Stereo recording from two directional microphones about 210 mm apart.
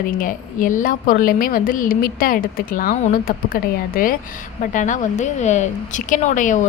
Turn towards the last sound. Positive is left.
turn(degrees=35)  # may be behind; listen again after turning